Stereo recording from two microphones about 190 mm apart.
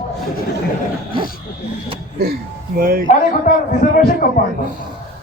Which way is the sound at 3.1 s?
45° left (ahead or behind).